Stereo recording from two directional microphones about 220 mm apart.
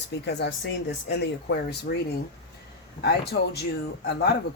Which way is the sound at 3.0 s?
50° left (ahead or behind).